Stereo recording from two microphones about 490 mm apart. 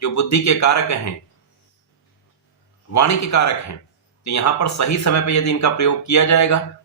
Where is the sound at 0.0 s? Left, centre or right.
Left.